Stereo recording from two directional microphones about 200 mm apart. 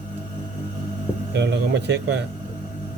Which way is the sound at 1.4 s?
60° right (ahead or behind).